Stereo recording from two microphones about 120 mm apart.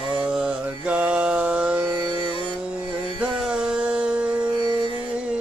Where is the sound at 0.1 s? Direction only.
5° right (ahead or behind).